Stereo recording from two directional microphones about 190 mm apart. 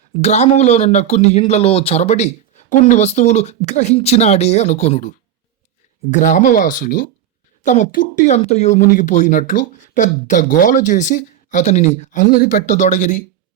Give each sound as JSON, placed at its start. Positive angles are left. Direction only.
{"t": 0.1, "sound": "speech", "side_deg": 35}